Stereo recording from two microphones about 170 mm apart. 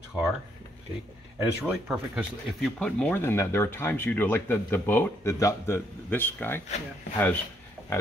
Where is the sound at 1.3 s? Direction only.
10° right (ahead or behind).